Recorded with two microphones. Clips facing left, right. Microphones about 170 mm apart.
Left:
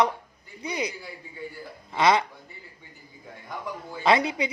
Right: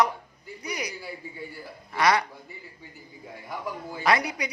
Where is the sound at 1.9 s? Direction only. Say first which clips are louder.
Left 2 dB; 20° left (ahead or behind).